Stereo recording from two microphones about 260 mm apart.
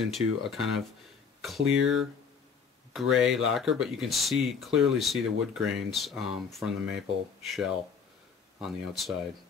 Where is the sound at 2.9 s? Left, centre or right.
Centre.